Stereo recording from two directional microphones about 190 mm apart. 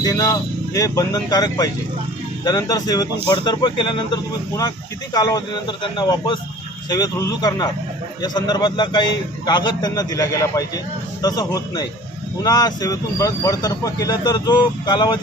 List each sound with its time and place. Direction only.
0.0 s speech: 20° left (ahead or behind)